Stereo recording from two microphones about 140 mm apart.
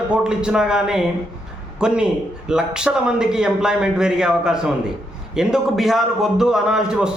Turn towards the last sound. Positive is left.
turn(degrees=-5)  # may be behind; listen again after turning